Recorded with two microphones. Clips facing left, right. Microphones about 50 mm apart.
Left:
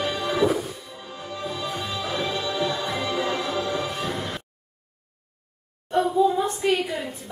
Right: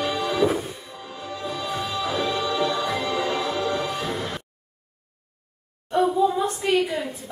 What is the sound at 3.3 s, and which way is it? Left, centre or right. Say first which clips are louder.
Music: right 1 dB; centre.